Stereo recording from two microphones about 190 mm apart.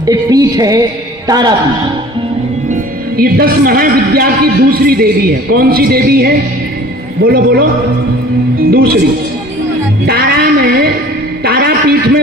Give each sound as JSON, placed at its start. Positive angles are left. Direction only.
{"t": 0.0, "sound": "music", "side_deg": -20}
{"t": 1.3, "sound": "speech", "side_deg": -20}
{"t": 2.6, "sound": "a man's voice", "side_deg": -45}
{"t": 8.7, "sound": "a man's voice", "side_deg": -50}
{"t": 10.1, "sound": "a sound", "side_deg": -55}